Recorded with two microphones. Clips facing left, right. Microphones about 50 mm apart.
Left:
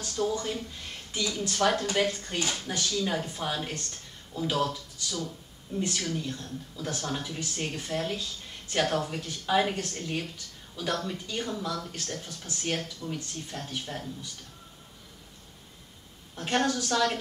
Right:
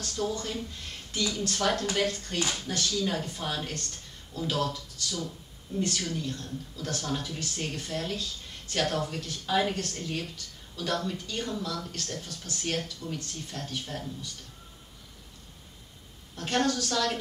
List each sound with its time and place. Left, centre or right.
0.0 s a woman's voice: centre
16.3 s a woman's voice: centre